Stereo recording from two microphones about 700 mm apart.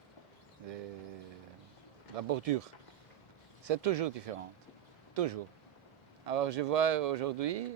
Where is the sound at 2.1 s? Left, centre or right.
Right.